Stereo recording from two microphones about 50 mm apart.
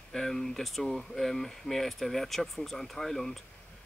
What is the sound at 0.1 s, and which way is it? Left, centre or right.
Speech, centre.